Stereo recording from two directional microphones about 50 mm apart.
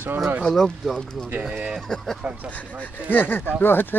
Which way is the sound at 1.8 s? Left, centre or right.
Centre.